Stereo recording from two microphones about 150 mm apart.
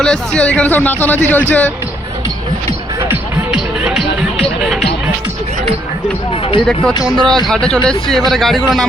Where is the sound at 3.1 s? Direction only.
5° right (ahead or behind).